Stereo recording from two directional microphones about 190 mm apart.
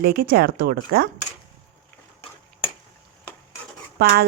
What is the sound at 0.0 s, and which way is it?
Speech, 55° right (ahead or behind).